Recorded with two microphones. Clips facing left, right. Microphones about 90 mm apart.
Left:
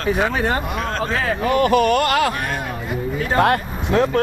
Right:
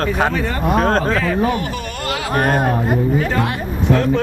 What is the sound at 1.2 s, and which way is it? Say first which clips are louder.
Speech: even; 55° left (ahead or behind).